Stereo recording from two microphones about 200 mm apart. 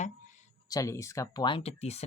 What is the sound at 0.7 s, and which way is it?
Speech, 15° left (ahead or behind).